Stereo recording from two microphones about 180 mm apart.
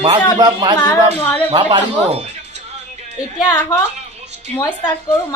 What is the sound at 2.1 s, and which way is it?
Music, 40° right (ahead or behind).